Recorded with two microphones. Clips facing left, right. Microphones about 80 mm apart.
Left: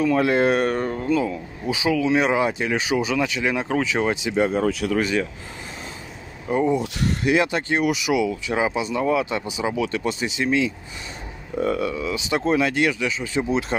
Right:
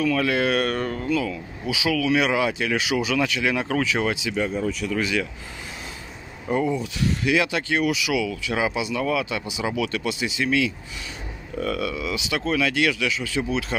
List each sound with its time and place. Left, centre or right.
0.0 s speech: left
0.7 s speech: centre
1.0 s speech: left
4.1 s speech: left
4.6 s speech: left
4.9 s speech: left
6.5 s speech: left
6.8 s speech: left
8.3 s speech: left
10.0 s speech: left